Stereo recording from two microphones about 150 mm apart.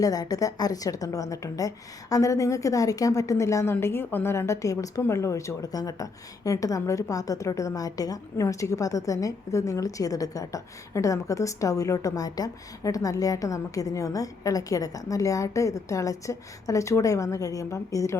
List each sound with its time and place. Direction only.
0.0 s a woman's voice: 25° left (ahead or behind)